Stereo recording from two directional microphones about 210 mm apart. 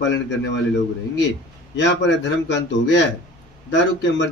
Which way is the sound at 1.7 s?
60° left (ahead or behind).